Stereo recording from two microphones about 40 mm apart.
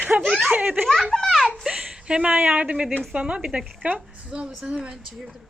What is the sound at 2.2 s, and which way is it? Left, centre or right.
A woman's voice, right.